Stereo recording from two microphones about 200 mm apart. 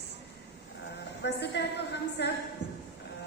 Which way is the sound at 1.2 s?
60° left (ahead or behind).